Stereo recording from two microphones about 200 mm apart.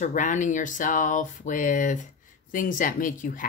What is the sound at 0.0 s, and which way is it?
A woman's voice, 40° left (ahead or behind).